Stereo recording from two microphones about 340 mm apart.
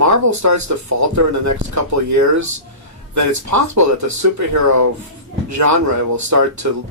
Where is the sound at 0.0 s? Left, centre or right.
Right.